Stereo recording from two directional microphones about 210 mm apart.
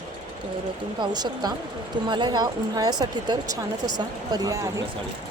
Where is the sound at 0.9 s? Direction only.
20° right (ahead or behind).